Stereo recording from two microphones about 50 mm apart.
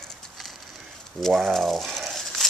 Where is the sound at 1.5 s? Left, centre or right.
Centre.